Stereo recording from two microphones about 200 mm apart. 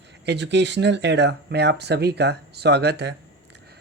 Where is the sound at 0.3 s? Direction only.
60° right (ahead or behind).